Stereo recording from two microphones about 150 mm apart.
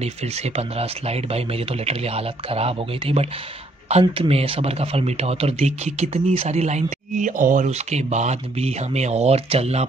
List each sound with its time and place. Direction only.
0.0 s speech: 45° right (ahead or behind)